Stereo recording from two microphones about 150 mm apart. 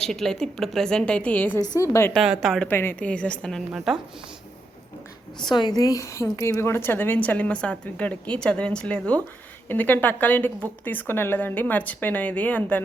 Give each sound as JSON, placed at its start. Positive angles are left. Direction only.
{"t": 0.0, "sound": "a woman's voice", "side_deg": 5}
{"t": 2.1, "sound": "a woman's voice", "side_deg": -5}
{"t": 2.6, "sound": "a woman's voice", "side_deg": 15}
{"t": 5.4, "sound": "a woman's voice", "side_deg": 30}